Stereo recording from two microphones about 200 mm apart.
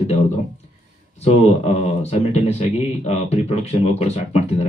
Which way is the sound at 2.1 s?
35° left (ahead or behind).